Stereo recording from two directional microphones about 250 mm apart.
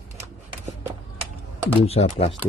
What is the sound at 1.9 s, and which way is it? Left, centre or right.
Speech, left.